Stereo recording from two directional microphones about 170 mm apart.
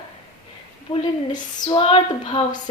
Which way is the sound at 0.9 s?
30° left (ahead or behind).